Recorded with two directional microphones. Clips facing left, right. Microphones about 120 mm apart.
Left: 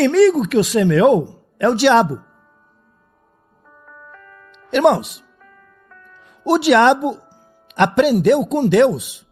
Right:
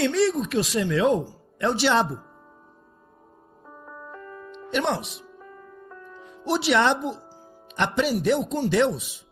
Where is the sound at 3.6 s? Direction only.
20° right (ahead or behind).